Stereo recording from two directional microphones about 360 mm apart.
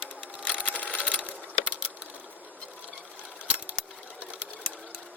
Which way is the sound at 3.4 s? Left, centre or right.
Centre.